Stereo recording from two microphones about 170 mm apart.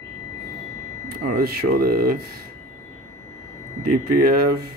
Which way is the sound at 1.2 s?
65° right (ahead or behind).